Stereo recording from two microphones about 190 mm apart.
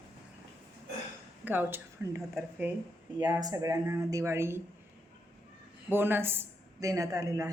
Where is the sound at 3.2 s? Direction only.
20° right (ahead or behind).